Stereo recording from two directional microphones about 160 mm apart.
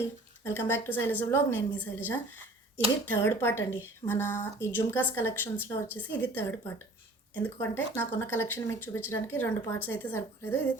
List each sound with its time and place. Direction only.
0.4 s a woman's voice: 15° left (ahead or behind)